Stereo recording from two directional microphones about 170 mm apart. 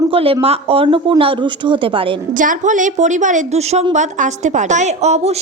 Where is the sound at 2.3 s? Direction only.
50° right (ahead or behind).